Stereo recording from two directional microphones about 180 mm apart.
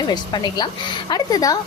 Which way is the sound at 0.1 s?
20° left (ahead or behind).